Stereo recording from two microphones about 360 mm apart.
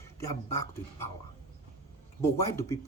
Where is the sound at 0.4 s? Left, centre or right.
Centre.